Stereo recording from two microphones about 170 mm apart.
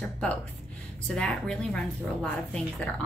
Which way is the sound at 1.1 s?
5° left (ahead or behind).